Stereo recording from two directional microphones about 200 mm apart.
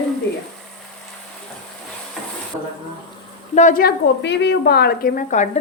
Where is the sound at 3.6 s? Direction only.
40° left (ahead or behind).